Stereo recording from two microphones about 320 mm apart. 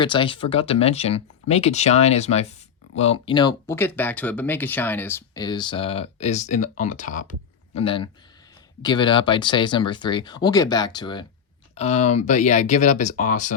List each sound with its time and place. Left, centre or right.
0.0 s speech: centre